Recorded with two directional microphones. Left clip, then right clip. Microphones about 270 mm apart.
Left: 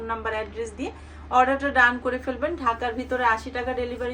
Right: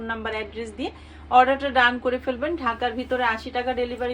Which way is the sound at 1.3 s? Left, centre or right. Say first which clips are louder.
Right 3 dB; right.